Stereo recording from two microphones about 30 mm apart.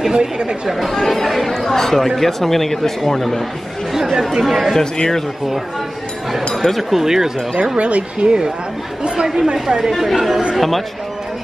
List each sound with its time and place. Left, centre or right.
0.1 s speech: right
0.8 s speech: centre
3.9 s speech: centre
4.9 s speech: centre
6.5 s speech: centre
6.8 s speech: centre
7.6 s speech: right
9.0 s speech: right
9.9 s speech: centre